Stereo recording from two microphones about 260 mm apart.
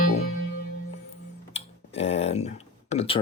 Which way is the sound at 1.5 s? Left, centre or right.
Left.